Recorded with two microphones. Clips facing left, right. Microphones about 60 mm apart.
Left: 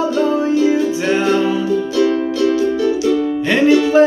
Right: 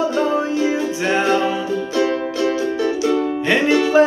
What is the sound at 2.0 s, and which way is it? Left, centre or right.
Music, right.